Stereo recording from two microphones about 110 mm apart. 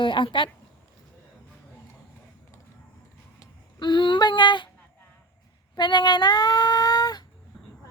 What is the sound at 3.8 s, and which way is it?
Female singing, 45° left (ahead or behind).